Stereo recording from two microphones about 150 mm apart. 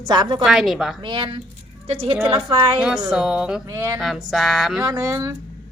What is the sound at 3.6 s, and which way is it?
Speech, 20° right (ahead or behind).